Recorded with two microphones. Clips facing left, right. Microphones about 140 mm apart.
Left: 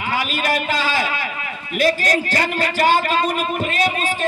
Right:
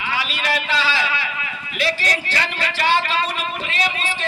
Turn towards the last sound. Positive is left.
turn(degrees=45)  # may be behind; listen again after turning